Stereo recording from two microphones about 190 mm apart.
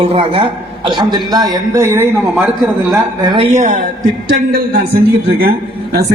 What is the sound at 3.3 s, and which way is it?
Speech, 30° right (ahead or behind).